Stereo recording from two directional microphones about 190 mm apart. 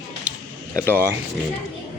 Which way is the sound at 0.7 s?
10° left (ahead or behind).